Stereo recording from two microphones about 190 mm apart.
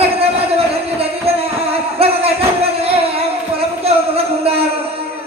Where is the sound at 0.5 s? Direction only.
30° right (ahead or behind).